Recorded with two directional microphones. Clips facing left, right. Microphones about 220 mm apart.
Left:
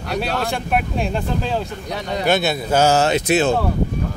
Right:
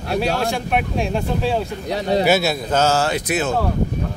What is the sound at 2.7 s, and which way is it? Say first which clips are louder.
Speech: left 4 dB; 15° left (ahead or behind).